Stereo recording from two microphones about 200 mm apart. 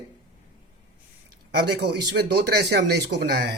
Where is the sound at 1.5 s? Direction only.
55° right (ahead or behind).